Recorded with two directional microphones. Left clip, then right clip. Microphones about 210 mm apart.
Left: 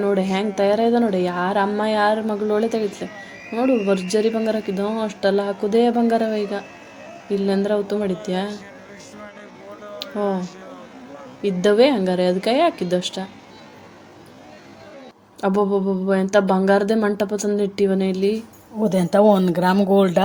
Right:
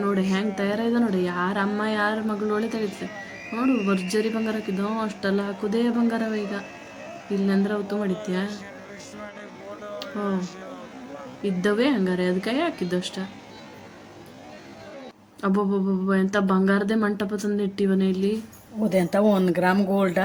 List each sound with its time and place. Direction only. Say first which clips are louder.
0.4 s speech: left 8 dB; 10° left (ahead or behind)
9.2 s a sound: right 1 dB; centre (ahead or behind)
11.6 s speech: left 8 dB; 10° left (ahead or behind)
15.4 s speech: left 5 dB; 10° left (ahead or behind)